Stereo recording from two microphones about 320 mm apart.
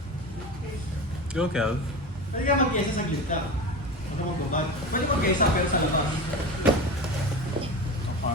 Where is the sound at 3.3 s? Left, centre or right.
Left.